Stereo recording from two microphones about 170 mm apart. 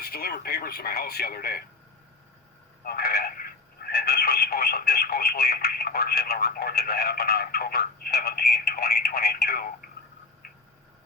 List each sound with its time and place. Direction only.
0.0 s speech: 65° left (ahead or behind)
2.8 s speech: 65° left (ahead or behind)